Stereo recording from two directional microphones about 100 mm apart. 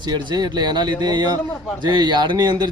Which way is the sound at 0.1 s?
45° right (ahead or behind).